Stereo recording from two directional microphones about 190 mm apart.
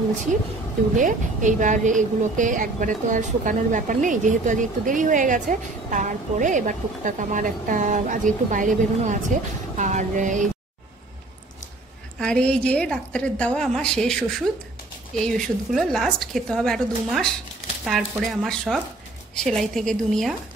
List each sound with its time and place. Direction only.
0.9 s speech: 40° right (ahead or behind)
12.2 s a woman's voice: 5° left (ahead or behind)